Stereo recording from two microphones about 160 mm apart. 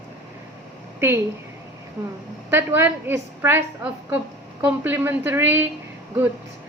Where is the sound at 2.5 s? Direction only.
15° right (ahead or behind).